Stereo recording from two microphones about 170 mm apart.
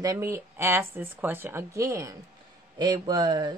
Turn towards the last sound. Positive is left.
turn(degrees=-25)  # may be behind; listen again after turning